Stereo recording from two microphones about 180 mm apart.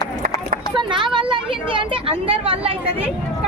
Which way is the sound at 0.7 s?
25° right (ahead or behind).